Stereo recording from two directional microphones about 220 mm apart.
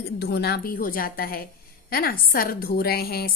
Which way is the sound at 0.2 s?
45° left (ahead or behind).